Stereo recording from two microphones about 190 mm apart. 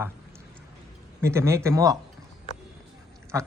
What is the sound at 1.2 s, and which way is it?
Speech, 15° right (ahead or behind).